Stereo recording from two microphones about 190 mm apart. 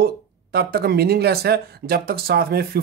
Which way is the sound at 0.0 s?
55° right (ahead or behind).